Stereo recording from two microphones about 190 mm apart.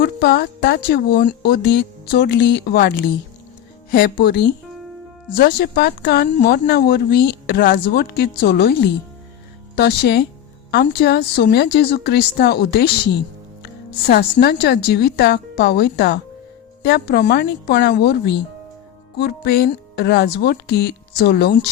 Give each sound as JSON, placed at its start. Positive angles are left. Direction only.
{"t": 0.0, "sound": "speech", "side_deg": 60}
{"t": 14.1, "sound": "speech", "side_deg": 60}